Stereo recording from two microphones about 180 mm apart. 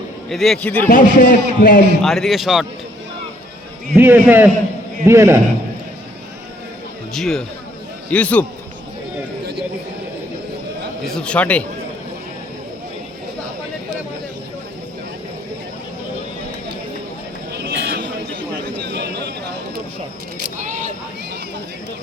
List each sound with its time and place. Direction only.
0.3 s a man's voice: centre (ahead or behind)
0.9 s a man's voice: 45° left (ahead or behind)
2.0 s a man's voice: centre (ahead or behind)
3.9 s a man's voice: 10° right (ahead or behind)
7.1 s a man's voice: centre (ahead or behind)
11.0 s a man's voice: 5° left (ahead or behind)
17.5 s a sound: 65° right (ahead or behind)